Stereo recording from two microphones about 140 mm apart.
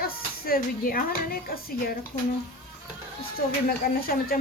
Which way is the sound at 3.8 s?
90° left.